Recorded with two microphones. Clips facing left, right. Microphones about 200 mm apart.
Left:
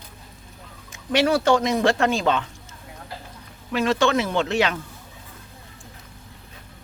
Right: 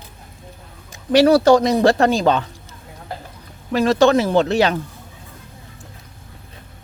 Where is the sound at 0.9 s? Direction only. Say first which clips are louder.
Right 7 dB; 35° right (ahead or behind).